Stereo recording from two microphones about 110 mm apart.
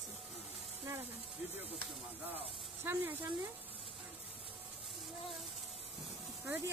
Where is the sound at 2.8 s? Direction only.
20° right (ahead or behind).